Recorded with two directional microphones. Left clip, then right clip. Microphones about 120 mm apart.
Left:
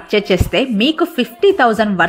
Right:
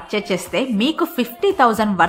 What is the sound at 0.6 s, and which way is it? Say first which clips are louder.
A woman's voice: left 4 dB; 25° left (ahead or behind).